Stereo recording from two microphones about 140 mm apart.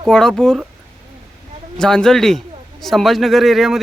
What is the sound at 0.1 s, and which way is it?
Speech, 5° left (ahead or behind).